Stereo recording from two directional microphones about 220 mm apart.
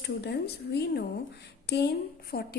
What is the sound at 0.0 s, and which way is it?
A woman's voice, 50° left (ahead or behind).